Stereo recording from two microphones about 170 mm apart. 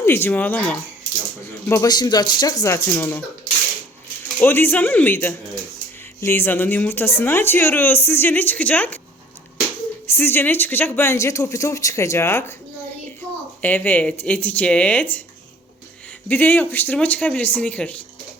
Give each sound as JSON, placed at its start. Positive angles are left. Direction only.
{"t": 0.0, "sound": "speech", "side_deg": 15}
{"t": 4.4, "sound": "speech", "side_deg": 10}
{"t": 10.1, "sound": "speech", "side_deg": 15}
{"t": 13.6, "sound": "speech", "side_deg": 10}
{"t": 16.3, "sound": "speech", "side_deg": 10}